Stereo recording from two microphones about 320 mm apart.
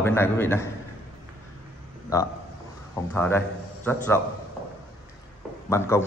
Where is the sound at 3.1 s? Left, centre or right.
Centre.